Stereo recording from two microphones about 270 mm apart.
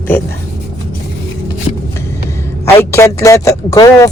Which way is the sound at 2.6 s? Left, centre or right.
Centre.